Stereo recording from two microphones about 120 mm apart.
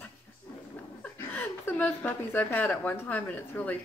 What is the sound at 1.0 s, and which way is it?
A woman's voice, 15° left (ahead or behind).